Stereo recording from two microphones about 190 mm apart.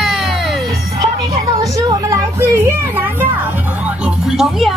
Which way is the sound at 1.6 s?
20° right (ahead or behind).